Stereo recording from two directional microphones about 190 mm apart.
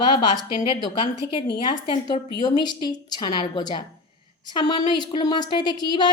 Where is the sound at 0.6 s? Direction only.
25° left (ahead or behind).